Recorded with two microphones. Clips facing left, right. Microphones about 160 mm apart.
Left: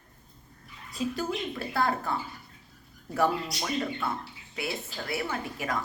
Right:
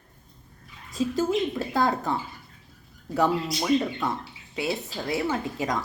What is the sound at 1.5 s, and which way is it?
Speech, 15° right (ahead or behind).